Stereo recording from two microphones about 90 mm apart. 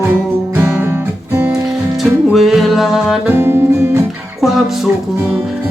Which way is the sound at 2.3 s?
5° right (ahead or behind).